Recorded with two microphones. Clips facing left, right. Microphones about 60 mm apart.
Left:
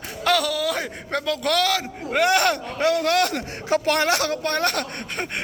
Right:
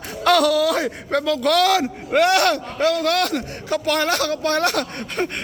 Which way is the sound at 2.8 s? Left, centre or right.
Left.